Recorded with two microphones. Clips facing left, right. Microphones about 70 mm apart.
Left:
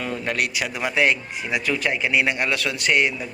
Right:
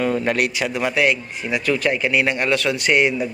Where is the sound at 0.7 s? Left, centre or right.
Centre.